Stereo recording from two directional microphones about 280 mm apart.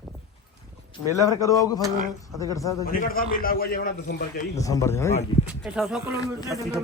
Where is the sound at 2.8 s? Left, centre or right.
Left.